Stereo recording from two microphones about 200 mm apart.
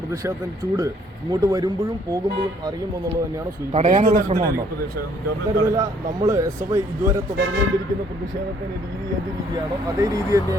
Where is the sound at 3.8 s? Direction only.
40° right (ahead or behind).